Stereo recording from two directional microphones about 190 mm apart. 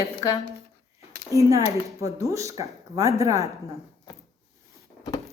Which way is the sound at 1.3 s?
15° right (ahead or behind).